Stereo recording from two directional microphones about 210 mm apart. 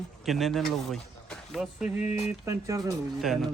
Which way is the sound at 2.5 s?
15° right (ahead or behind).